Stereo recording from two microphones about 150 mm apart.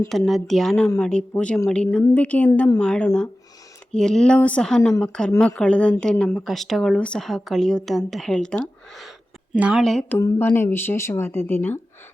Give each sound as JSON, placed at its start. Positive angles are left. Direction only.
{"t": 0.1, "sound": "speech", "side_deg": 0}
{"t": 10.2, "sound": "speech", "side_deg": 20}